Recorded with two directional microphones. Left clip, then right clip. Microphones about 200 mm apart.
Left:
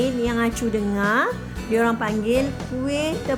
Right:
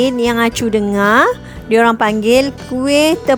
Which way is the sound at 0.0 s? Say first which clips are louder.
Right 9 dB; 55° right (ahead or behind).